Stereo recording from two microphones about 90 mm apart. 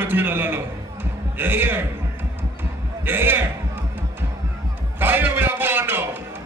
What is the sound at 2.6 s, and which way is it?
Music, 25° right (ahead or behind).